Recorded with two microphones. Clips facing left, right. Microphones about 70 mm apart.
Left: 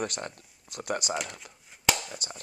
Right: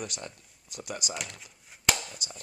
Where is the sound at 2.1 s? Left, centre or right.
Left.